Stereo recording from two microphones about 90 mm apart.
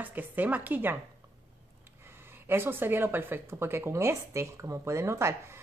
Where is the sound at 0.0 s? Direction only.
20° right (ahead or behind).